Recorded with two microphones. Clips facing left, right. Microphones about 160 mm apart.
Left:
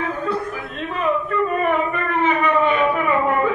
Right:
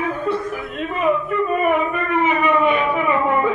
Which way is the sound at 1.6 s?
10° right (ahead or behind).